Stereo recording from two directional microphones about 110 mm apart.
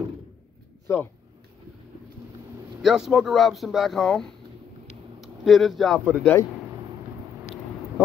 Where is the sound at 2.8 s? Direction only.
5° right (ahead or behind).